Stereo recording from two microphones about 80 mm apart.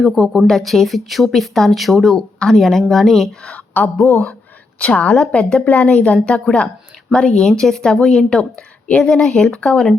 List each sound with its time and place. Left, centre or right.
0.0 s speech: centre
3.8 s speech: left
9.2 s speech: centre